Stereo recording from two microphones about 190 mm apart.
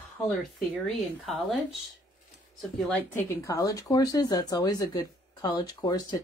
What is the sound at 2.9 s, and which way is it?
Speech, 15° left (ahead or behind).